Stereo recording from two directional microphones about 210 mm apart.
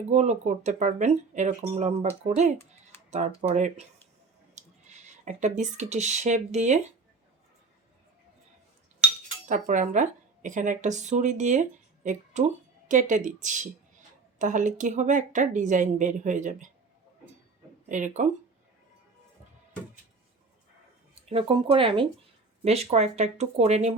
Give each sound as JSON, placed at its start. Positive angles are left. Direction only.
{"t": 0.1, "sound": "speech", "side_deg": -35}
{"t": 9.5, "sound": "speech", "side_deg": -40}
{"t": 17.8, "sound": "speech", "side_deg": -35}
{"t": 21.2, "sound": "speech", "side_deg": -25}